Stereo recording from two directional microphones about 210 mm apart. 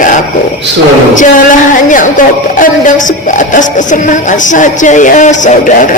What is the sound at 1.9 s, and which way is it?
Speech, 40° left (ahead or behind).